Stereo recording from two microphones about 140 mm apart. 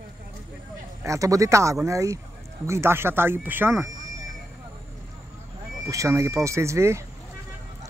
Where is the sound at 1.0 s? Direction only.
20° right (ahead or behind).